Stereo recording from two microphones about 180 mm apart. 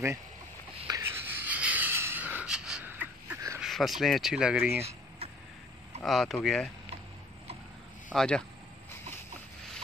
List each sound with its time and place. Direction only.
0.8 s a sound: 15° right (ahead or behind)
3.5 s speech: centre (ahead or behind)
6.0 s speech: centre (ahead or behind)
8.1 s speech: 5° left (ahead or behind)